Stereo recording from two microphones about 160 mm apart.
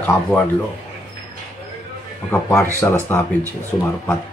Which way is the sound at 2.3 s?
15° left (ahead or behind).